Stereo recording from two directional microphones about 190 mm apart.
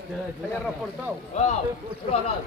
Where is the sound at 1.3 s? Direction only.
35° left (ahead or behind).